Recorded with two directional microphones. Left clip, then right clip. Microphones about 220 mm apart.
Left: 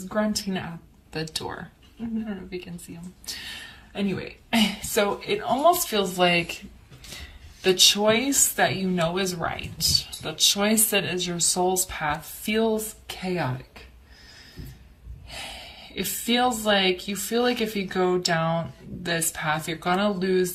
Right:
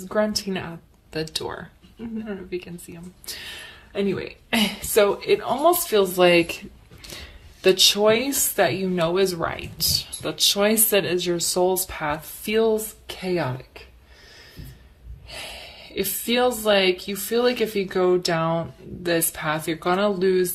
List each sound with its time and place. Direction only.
0.1 s speech: 45° right (ahead or behind)
1.1 s a woman's voice: 35° right (ahead or behind)
15.3 s a woman's voice: 40° right (ahead or behind)